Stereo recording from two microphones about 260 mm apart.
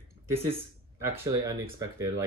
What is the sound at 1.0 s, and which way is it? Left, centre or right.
Speech, centre.